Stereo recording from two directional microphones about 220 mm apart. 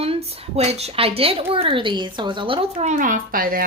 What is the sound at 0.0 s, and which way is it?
A woman's voice, 25° right (ahead or behind).